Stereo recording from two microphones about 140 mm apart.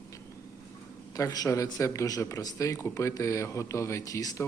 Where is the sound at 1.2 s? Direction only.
25° left (ahead or behind).